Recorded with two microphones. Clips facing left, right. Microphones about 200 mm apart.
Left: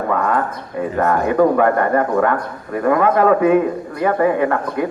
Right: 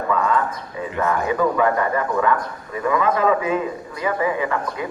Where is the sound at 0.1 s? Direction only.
55° left (ahead or behind).